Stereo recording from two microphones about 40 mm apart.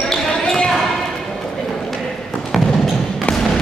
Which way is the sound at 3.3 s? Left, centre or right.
Left.